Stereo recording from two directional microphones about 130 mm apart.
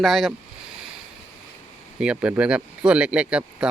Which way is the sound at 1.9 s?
10° right (ahead or behind).